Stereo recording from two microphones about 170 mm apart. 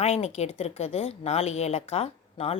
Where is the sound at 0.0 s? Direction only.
40° left (ahead or behind).